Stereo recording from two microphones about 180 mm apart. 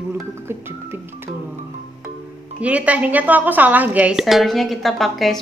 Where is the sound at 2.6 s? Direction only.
5° right (ahead or behind).